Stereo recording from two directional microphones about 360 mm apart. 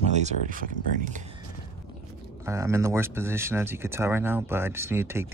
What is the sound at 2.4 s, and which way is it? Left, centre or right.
Speech, centre.